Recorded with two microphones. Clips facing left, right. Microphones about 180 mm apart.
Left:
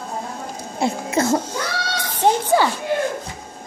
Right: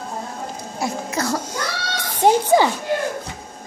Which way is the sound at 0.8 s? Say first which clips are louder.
Left 4 dB; 25° left (ahead or behind).